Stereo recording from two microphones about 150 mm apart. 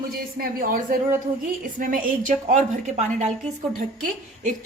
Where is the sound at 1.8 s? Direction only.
60° right (ahead or behind).